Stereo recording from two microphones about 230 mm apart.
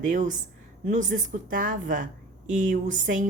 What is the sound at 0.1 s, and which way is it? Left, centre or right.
Speech, right.